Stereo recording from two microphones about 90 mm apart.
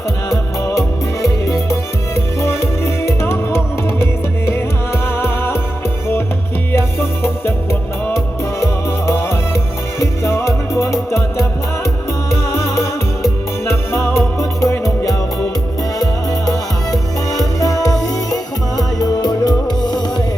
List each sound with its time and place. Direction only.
0.3 s music: 35° left (ahead or behind)
6.7 s music: 30° left (ahead or behind)
17.6 s music: 40° left (ahead or behind)